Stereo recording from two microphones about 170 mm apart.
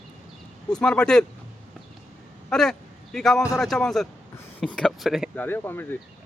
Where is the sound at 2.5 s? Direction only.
5° left (ahead or behind).